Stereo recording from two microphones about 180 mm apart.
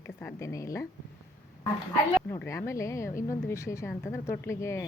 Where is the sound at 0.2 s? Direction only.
15° left (ahead or behind).